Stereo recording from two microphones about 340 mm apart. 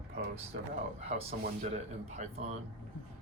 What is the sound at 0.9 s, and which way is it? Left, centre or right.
Speech, centre.